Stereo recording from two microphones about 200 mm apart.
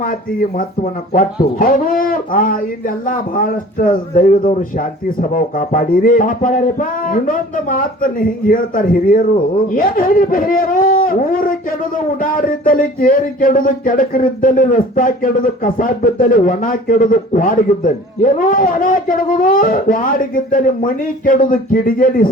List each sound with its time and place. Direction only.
0.0 s speech: 45° left (ahead or behind)